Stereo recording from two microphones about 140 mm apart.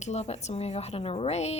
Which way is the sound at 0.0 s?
50° left (ahead or behind).